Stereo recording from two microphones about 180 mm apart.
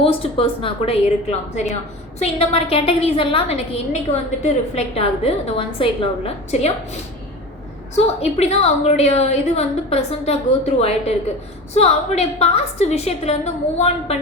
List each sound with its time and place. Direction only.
0.0 s a woman's voice: 30° left (ahead or behind)
7.9 s a woman's voice: 35° left (ahead or behind)